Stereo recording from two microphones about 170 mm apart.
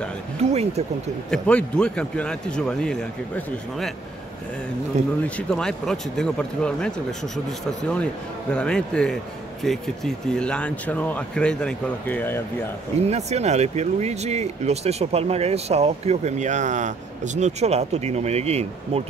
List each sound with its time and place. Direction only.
0.4 s speech: 40° right (ahead or behind)
1.3 s a man's voice: 5° left (ahead or behind)
5.5 s a man's voice: 5° left (ahead or behind)
13.0 s speech: 40° right (ahead or behind)